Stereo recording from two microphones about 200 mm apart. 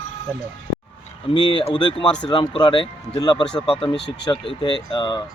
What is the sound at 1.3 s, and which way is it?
Speech, 25° left (ahead or behind).